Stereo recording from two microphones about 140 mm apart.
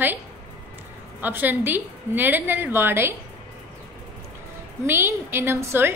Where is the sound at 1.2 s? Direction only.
15° right (ahead or behind).